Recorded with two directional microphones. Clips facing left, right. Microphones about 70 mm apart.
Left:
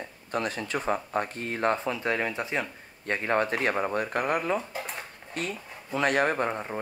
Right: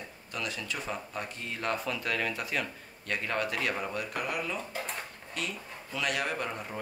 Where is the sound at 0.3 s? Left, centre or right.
Left.